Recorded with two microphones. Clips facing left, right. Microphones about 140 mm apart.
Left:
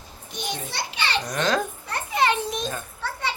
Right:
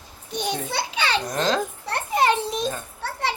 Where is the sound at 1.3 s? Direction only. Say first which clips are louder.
Left 2 dB; 25° right (ahead or behind).